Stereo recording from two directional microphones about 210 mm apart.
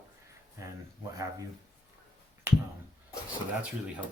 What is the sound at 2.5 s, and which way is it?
Speech, 10° right (ahead or behind).